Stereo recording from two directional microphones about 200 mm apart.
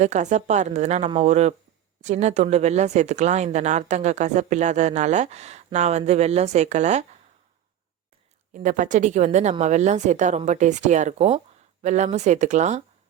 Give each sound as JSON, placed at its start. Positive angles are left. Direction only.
{"t": 0.0, "sound": "speech", "side_deg": -35}
{"t": 8.5, "sound": "speech", "side_deg": -40}